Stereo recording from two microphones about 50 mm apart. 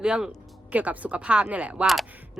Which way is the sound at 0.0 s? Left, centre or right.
Centre.